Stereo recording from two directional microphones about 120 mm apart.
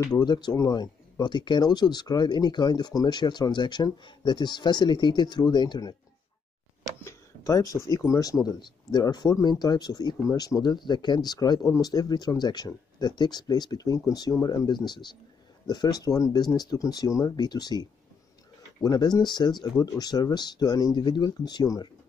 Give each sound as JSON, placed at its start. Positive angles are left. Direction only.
{"t": 0.1, "sound": "speech", "side_deg": 35}
{"t": 7.0, "sound": "speech", "side_deg": 25}